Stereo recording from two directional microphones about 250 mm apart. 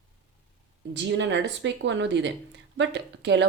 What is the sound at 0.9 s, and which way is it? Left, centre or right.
A woman's voice, right.